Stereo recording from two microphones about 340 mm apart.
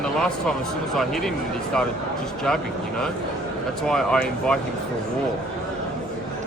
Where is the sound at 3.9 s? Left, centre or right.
Centre.